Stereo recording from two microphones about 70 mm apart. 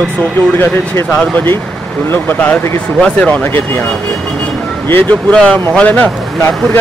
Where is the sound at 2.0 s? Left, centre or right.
Left.